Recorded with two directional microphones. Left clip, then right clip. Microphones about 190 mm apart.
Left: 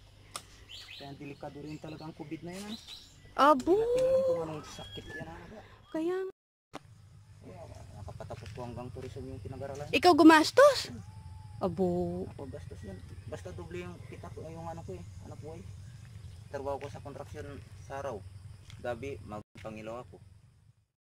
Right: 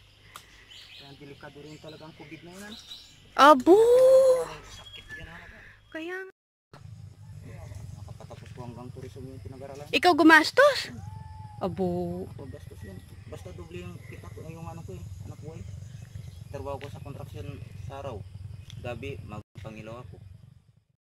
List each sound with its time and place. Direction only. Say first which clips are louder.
3.3 s speech: right 7 dB; centre (ahead or behind)
3.7 s speech: right 10 dB; 25° right (ahead or behind)
5.6 s a woman's voice: left 4 dB; 20° left (ahead or behind)
8.2 s speech: left 2 dB; centre (ahead or behind)
9.9 s speech: right 3 dB; 10° left (ahead or behind)
16.5 s speech: even; centre (ahead or behind)